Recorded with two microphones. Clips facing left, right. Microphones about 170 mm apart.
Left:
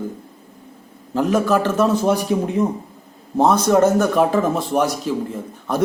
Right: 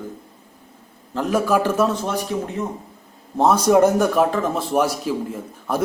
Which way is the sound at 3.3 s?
5° right (ahead or behind).